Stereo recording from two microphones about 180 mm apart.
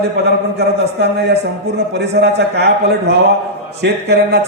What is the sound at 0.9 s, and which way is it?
A man's voice, 65° right (ahead or behind).